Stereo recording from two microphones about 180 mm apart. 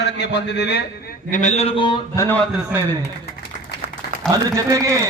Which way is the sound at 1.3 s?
40° left (ahead or behind).